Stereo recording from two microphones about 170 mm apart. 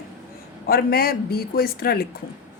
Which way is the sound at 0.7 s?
65° left (ahead or behind).